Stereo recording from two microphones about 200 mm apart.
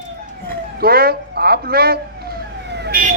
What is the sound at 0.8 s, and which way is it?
Police car, 50° right (ahead or behind).